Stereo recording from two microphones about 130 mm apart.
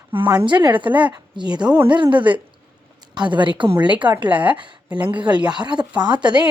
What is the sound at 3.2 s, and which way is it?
Speech, 35° right (ahead or behind).